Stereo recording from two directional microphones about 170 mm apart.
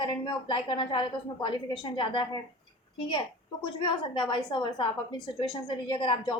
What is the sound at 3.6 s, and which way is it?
A woman's voice, 25° left (ahead or behind).